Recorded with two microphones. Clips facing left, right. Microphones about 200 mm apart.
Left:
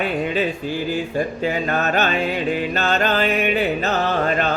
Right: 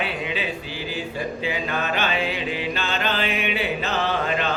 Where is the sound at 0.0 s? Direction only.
45° left (ahead or behind).